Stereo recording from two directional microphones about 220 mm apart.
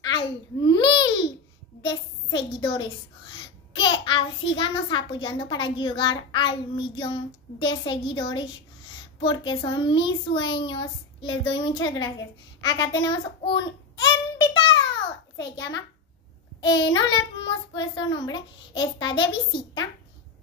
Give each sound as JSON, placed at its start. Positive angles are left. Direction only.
{"t": 0.0, "sound": "babbling", "side_deg": 20}
{"t": 1.8, "sound": "a woman's voice", "side_deg": 20}
{"t": 12.5, "sound": "child singing", "side_deg": 20}
{"t": 15.3, "sound": "a child's voice", "side_deg": 20}